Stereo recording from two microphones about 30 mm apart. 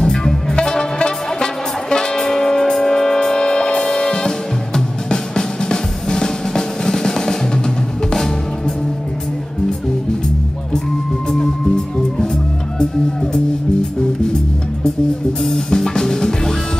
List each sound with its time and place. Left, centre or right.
0.0 s music: left
11.2 s music: centre
15.4 s music: centre